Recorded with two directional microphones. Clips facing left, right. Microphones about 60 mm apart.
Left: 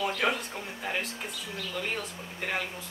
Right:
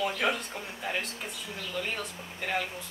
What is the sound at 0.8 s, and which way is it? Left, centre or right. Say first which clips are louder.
A woman's voice: even; centre.